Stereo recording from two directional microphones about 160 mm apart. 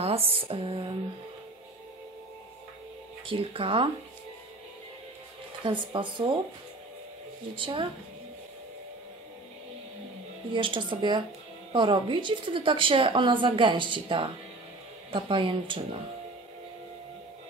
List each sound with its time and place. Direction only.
0.0 s a woman's voice: 35° right (ahead or behind)
3.3 s a woman's voice: 35° right (ahead or behind)
5.6 s a woman's voice: 30° right (ahead or behind)
7.5 s a woman's voice: 30° right (ahead or behind)
10.5 s a woman's voice: 30° right (ahead or behind)